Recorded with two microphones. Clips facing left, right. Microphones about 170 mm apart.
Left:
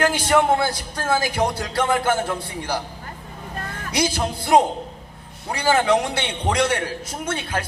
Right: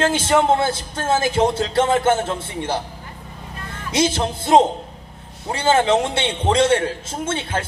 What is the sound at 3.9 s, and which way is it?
A man's voice, 25° right (ahead or behind).